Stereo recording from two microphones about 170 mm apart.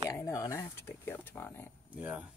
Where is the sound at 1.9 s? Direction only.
10° right (ahead or behind).